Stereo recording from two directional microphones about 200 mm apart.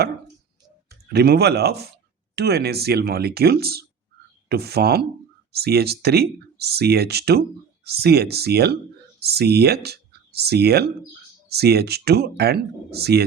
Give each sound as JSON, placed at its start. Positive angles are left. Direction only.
{"t": 0.9, "sound": "speech", "side_deg": -55}